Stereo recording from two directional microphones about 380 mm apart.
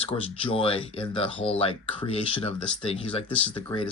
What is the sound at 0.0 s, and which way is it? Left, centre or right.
Speech, centre.